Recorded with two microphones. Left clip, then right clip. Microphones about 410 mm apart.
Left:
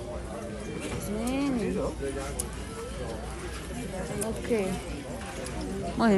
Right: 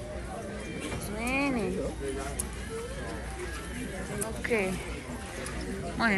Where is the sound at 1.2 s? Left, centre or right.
Centre.